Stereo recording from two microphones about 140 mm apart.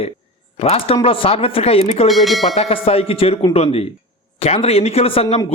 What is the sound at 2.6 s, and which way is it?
Speech, 45° left (ahead or behind).